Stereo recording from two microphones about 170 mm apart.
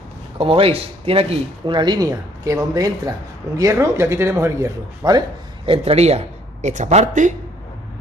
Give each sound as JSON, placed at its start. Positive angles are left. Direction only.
{"t": 0.4, "sound": "speech", "side_deg": -35}
{"t": 5.7, "sound": "speech", "side_deg": -35}